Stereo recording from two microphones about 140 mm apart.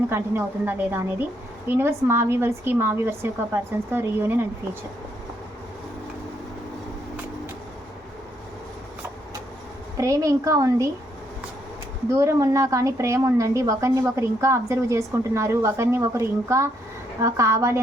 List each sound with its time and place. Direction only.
0.1 s speech: 15° right (ahead or behind)
10.0 s a woman's voice: 20° right (ahead or behind)
12.0 s a woman's voice: 20° right (ahead or behind)